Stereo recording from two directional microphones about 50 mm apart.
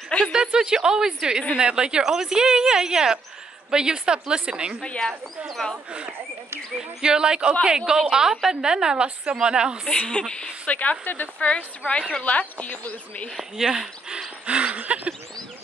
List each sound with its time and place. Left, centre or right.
0.3 s a woman's voice: centre
4.8 s a woman's voice: centre
5.5 s a woman's voice: centre
6.8 s a woman's voice: centre
9.8 s a woman's voice: centre
10.7 s a woman's voice: left
13.4 s a woman's voice: centre
14.4 s a sound: right